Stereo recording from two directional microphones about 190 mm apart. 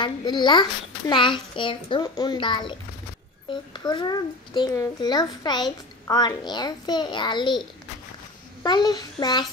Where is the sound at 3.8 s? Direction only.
20° left (ahead or behind).